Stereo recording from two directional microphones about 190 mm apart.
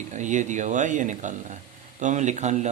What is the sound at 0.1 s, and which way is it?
Speech, 40° right (ahead or behind).